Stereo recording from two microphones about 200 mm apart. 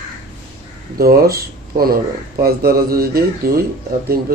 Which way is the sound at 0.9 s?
50° right (ahead or behind).